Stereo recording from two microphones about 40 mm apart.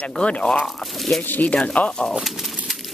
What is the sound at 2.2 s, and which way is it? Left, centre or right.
Horse, centre.